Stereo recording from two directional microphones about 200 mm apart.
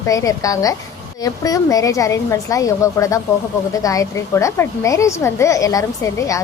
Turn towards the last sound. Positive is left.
turn(degrees=15)  # may be behind; listen again after turning